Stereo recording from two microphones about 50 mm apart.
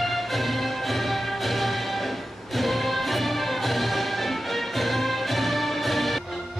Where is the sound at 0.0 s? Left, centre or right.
Centre.